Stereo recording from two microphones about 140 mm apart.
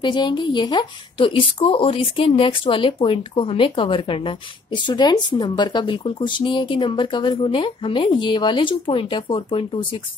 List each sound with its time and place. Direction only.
0.0 s a woman's voice: 30° left (ahead or behind)